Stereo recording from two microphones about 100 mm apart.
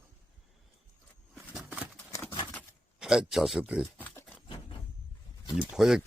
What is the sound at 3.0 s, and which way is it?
Speech, 5° right (ahead or behind).